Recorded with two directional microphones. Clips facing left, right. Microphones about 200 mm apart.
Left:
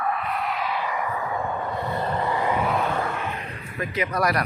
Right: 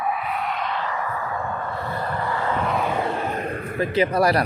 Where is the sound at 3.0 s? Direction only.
30° right (ahead or behind).